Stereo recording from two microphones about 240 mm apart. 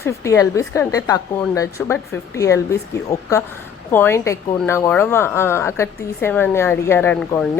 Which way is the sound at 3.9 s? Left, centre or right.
Centre.